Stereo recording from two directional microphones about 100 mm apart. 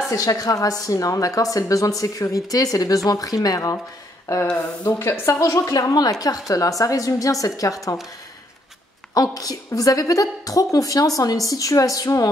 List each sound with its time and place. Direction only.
0.1 s a woman's voice: 35° left (ahead or behind)
9.1 s a woman's voice: 40° left (ahead or behind)